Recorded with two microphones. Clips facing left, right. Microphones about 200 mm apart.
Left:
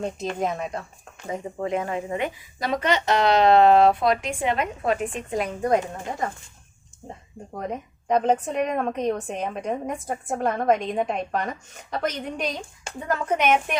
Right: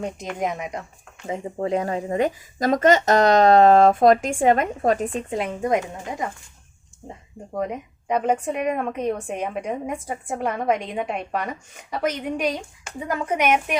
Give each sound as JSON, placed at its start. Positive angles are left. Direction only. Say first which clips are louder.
{"t": 0.3, "sound": "a woman's voice", "louder": "even", "side_deg": -15}
{"t": 1.3, "sound": "speech", "louder": "right 3 dB", "side_deg": -35}
{"t": 7.7, "sound": "a woman's voice", "louder": "left 1 dB", "side_deg": -10}